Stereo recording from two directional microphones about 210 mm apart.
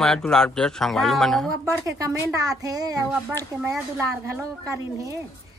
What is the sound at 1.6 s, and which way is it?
A woman's voice, 15° right (ahead or behind).